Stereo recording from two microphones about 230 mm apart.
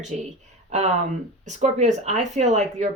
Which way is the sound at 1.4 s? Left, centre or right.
Right.